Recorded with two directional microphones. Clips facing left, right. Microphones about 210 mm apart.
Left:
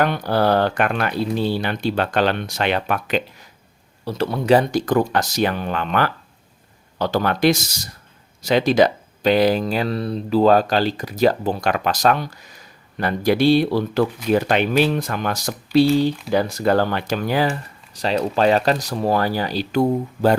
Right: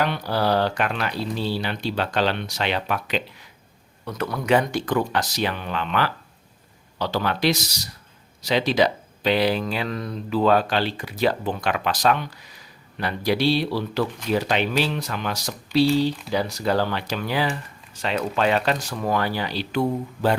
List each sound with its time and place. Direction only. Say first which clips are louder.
0.0 s speech: left 5 dB; 50° left (ahead or behind)
4.0 s speech: left 5 dB; 30° left (ahead or behind)